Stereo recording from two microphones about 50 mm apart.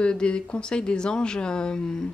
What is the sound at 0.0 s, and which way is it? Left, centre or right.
Speech, centre.